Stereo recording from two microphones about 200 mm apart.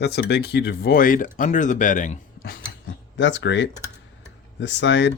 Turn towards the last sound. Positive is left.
turn(degrees=60)  # may be behind; listen again after turning